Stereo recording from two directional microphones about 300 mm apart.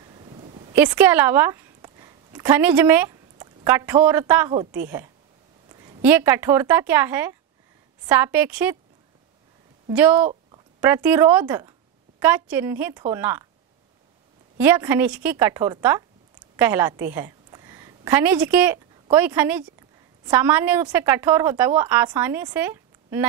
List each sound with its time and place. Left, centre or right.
0.1 s a sound: centre
0.7 s a woman's voice: centre
5.7 s a sound: centre
6.0 s a woman's voice: centre
9.9 s a woman's voice: centre
14.6 s a woman's voice: centre